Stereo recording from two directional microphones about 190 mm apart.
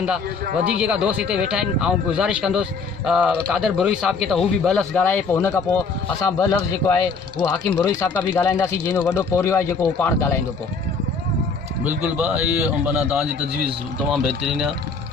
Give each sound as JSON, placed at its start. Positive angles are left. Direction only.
{"t": 0.5, "sound": "a man's voice", "side_deg": -5}
{"t": 11.9, "sound": "a man's voice", "side_deg": -5}